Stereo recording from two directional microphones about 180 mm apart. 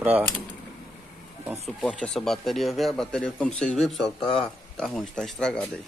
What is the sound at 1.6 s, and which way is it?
Speech, 5° left (ahead or behind).